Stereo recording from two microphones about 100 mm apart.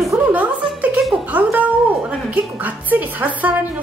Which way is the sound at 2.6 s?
15° right (ahead or behind).